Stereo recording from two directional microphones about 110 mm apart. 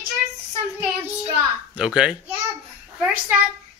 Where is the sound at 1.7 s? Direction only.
10° right (ahead or behind).